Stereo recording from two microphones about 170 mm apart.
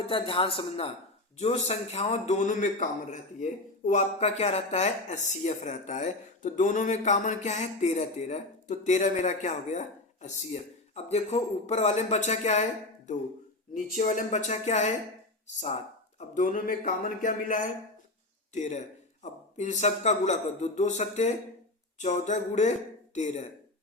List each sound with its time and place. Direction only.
0.1 s a man's voice: 30° left (ahead or behind)
13.7 s a man's voice: 50° left (ahead or behind)
16.1 s a man's voice: 50° left (ahead or behind)